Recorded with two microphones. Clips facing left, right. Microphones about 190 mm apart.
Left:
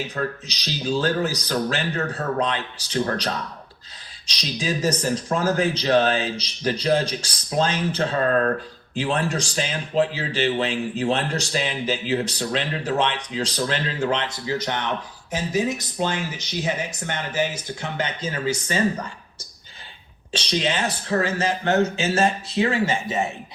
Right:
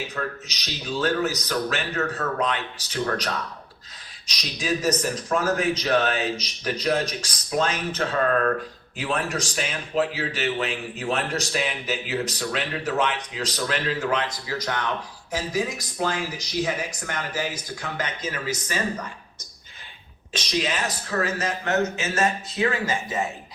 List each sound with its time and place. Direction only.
0.1 s speech: 35° left (ahead or behind)
20.3 s speech: 30° left (ahead or behind)